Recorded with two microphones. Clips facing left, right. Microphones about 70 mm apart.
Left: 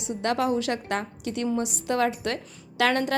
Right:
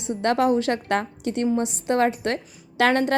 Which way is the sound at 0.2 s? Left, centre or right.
Right.